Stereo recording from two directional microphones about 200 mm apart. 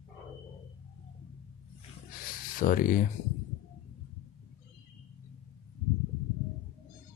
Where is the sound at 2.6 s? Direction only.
45° left (ahead or behind).